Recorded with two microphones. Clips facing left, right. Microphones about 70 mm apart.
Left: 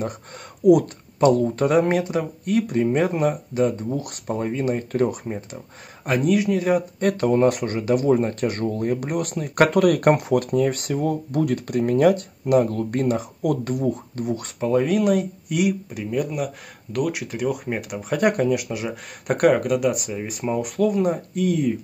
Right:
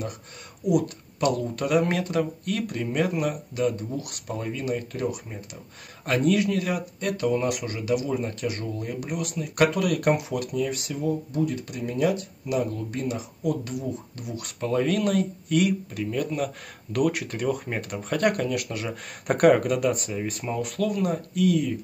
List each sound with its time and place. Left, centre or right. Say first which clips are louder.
1.2 s speech: left 8 dB; left
6.0 s speech: left 2 dB; centre
7.0 s speech: left 4 dB; left
14.6 s speech: left 4 dB; centre
19.2 s speech: left 1 dB; centre; by 21.7 s left